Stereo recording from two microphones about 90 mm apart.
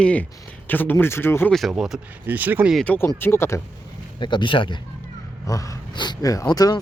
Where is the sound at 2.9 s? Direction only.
25° left (ahead or behind).